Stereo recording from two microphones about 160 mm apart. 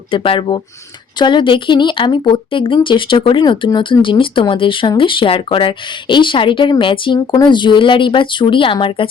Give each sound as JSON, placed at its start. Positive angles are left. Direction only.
{"t": 0.1, "sound": "speech", "side_deg": 35}